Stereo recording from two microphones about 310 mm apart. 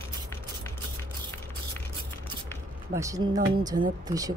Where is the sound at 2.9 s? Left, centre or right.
Centre.